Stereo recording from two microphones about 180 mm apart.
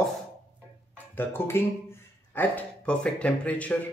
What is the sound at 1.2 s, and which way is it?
Speech, 15° left (ahead or behind).